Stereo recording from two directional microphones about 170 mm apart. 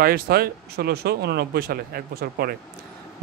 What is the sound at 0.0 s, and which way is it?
Speech, 65° right (ahead or behind).